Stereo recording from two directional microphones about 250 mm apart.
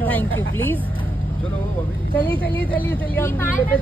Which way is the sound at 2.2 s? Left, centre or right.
Centre.